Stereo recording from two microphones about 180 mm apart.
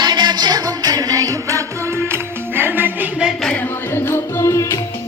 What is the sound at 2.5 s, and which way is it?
Music, 10° right (ahead or behind).